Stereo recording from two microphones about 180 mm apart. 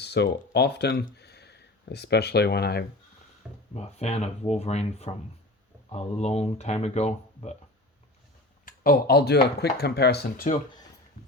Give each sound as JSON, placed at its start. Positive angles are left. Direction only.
{"t": 0.0, "sound": "a sound", "side_deg": 70}
{"t": 0.5, "sound": "speech", "side_deg": 70}
{"t": 3.4, "sound": "speech", "side_deg": -5}
{"t": 3.8, "sound": "speech", "side_deg": 35}
{"t": 8.6, "sound": "speech", "side_deg": 55}